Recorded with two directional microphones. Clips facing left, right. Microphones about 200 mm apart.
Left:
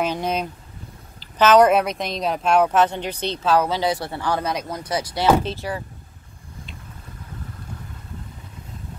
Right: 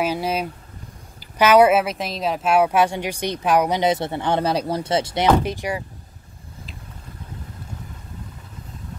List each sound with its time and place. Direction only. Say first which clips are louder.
0.0 s speech: right 1 dB; 5° right (ahead or behind)